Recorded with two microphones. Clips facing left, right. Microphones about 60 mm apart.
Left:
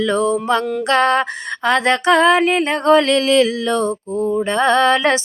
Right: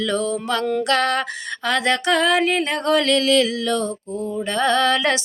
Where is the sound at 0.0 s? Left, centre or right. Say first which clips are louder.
Left 5 dB; left.